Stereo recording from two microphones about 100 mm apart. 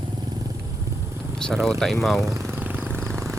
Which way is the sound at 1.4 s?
5° left (ahead or behind).